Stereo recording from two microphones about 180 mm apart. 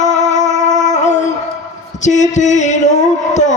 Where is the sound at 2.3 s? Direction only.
40° left (ahead or behind).